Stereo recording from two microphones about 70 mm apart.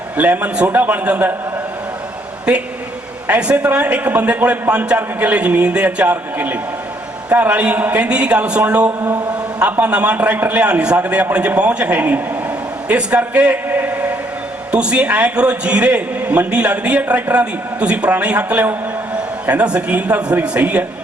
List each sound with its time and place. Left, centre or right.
0.2 s a man's voice: right
3.2 s a man's voice: centre
13.7 s a sound: right
14.7 s a man's voice: centre